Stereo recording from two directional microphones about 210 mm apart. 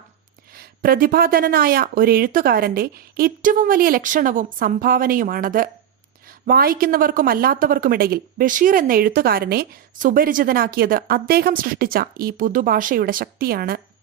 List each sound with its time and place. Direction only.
0.5 s a woman's voice: 45° right (ahead or behind)